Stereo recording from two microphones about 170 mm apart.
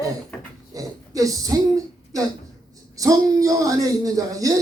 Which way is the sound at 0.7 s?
20° right (ahead or behind).